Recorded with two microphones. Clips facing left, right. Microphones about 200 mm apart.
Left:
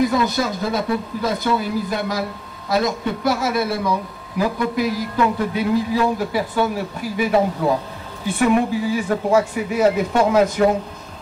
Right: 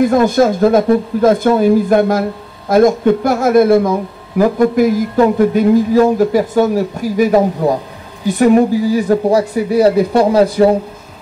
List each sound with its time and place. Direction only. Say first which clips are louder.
0.0 s speech: right 8 dB; 50° right (ahead or behind); by 10.8 s 35° right (ahead or behind)